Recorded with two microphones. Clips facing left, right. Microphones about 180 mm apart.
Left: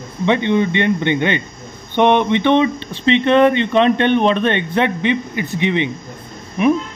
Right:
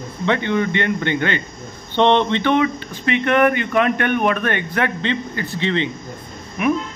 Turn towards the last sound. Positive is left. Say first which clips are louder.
# left 4 dB
turn(degrees=30)  # may be behind; listen again after turning